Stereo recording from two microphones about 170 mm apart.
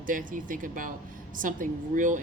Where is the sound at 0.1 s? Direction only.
50° right (ahead or behind).